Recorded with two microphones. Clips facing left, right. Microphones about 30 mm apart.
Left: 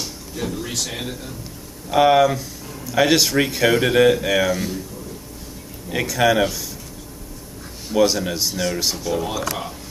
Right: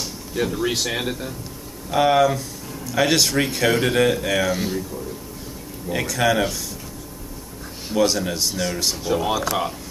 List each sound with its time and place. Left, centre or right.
0.3 s speech: centre
1.9 s speech: centre
4.6 s speech: centre
5.9 s speech: centre
7.9 s speech: centre
9.0 s speech: centre